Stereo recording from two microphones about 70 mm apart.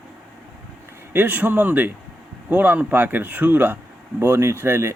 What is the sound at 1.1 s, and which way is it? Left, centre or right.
Speech, right.